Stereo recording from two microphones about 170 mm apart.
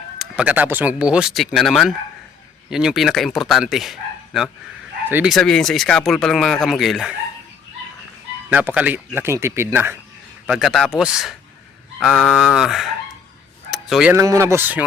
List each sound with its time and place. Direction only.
0.2 s speech: 5° right (ahead or behind)
5.0 s speech: 10° right (ahead or behind)
5.3 s speech: 5° left (ahead or behind)
8.4 s speech: 10° right (ahead or behind)
10.4 s speech: centre (ahead or behind)
13.7 s a sound: centre (ahead or behind)
14.2 s speech: 15° right (ahead or behind)